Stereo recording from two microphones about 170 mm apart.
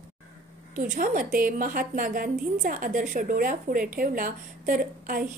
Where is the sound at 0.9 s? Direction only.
55° right (ahead or behind).